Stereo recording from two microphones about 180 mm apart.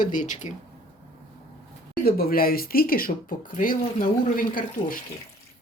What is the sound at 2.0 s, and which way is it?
Speech, 55° left (ahead or behind).